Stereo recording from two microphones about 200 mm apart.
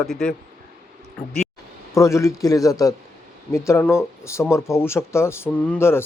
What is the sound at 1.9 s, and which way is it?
Speech, 15° left (ahead or behind).